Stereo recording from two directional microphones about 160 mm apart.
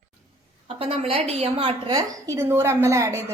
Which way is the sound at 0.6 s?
35° right (ahead or behind).